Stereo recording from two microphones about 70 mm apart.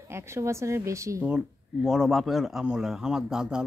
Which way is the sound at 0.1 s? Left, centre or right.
Right.